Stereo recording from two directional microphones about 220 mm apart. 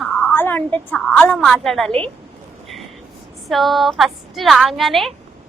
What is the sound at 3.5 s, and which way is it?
A woman's voice, centre (ahead or behind).